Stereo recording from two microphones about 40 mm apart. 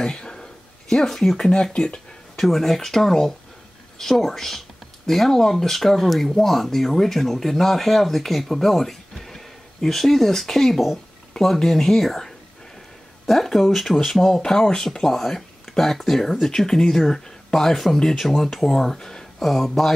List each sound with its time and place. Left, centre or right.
0.0 s a sound: centre
1.5 s speech: left
2.3 s speech: centre
13.3 s speech: centre
14.4 s speech: centre
19.4 s speech: centre